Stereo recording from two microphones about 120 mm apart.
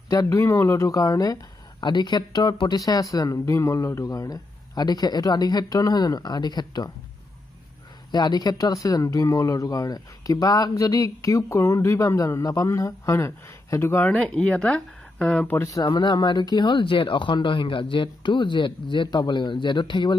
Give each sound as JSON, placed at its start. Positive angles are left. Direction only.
{"t": 0.1, "sound": "speech", "side_deg": 30}
{"t": 8.1, "sound": "speech", "side_deg": 35}
{"t": 15.7, "sound": "speech", "side_deg": 35}